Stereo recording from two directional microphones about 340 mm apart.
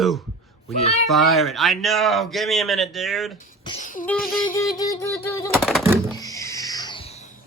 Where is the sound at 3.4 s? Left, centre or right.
Left.